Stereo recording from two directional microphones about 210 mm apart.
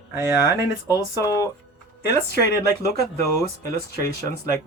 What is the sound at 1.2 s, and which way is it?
Speech, 15° left (ahead or behind).